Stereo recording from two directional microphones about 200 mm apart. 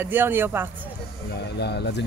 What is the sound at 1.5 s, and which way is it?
Speech, 55° left (ahead or behind).